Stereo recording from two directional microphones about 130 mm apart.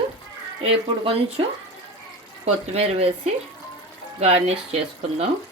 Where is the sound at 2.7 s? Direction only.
50° right (ahead or behind).